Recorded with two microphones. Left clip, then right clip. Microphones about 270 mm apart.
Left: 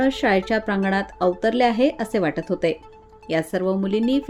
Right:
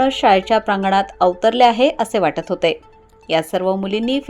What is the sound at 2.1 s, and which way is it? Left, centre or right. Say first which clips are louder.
Speech: right 5 dB; centre.